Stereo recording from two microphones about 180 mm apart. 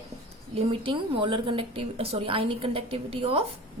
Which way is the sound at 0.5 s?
30° right (ahead or behind).